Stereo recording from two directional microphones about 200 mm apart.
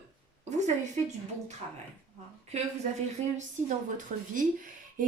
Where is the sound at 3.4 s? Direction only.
40° right (ahead or behind).